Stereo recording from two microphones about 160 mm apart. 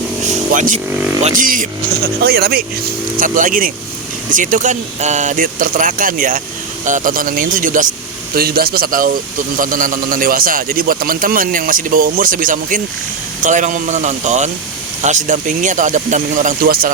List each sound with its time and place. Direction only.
0.2 s vehicle: 50° right (ahead or behind)
1.2 s speech: 55° right (ahead or behind); by 2.6 s 75° right (ahead or behind)
3.2 s a man's voice: 55° right (ahead or behind)
8.4 s a man's voice: 70° right (ahead or behind)